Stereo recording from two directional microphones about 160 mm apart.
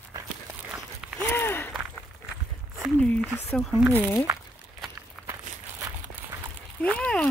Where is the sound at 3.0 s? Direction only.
5° left (ahead or behind).